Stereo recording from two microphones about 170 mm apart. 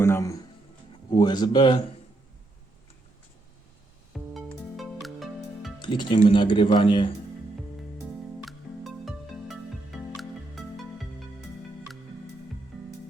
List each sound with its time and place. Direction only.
0.0 s speech: 15° left (ahead or behind)
4.1 s music: centre (ahead or behind)
5.8 s speech: 25° left (ahead or behind)
8.0 s music: centre (ahead or behind)